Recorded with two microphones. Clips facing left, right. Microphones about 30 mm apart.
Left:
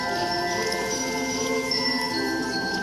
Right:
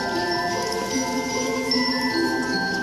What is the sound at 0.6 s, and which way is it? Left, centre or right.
Music, centre.